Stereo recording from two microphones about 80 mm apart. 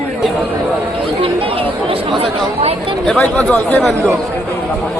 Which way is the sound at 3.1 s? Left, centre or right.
Centre.